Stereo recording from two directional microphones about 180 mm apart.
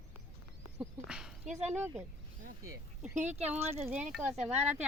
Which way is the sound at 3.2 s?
40° right (ahead or behind).